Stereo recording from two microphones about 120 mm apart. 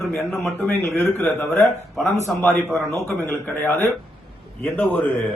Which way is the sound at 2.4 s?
5° left (ahead or behind).